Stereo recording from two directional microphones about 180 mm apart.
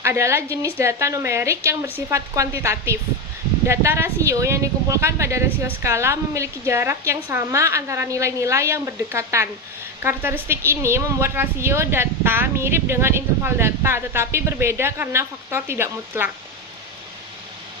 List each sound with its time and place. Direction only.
0.0 s a woman's voice: 15° right (ahead or behind)